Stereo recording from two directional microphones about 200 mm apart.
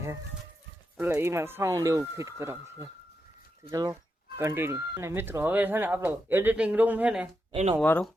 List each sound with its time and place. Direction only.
0.9 s speech: 10° right (ahead or behind)
7.5 s speech: 30° right (ahead or behind)
7.8 s speech: 5° left (ahead or behind)